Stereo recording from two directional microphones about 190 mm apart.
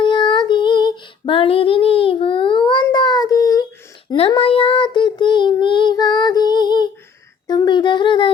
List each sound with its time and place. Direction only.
0.0 s female singing: 25° left (ahead or behind)
2.8 s child singing: 20° left (ahead or behind)
7.4 s a sound: 20° left (ahead or behind)